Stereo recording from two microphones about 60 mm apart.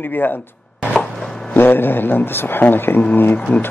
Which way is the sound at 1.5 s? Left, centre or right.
Left.